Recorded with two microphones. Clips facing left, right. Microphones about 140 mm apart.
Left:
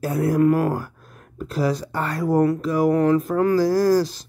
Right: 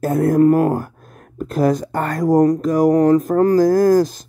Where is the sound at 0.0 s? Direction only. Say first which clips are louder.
Right 5 dB; 45° right (ahead or behind).